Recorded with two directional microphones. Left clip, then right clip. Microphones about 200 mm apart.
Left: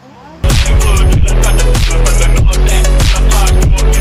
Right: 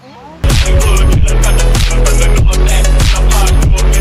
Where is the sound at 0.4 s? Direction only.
Centre (ahead or behind).